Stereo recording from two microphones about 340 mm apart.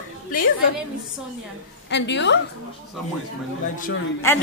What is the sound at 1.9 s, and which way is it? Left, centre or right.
Speech, left.